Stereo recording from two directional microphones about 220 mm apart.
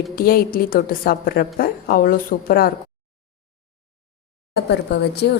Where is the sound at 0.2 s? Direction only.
40° left (ahead or behind).